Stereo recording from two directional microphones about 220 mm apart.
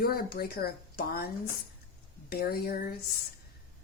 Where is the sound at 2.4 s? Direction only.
45° left (ahead or behind).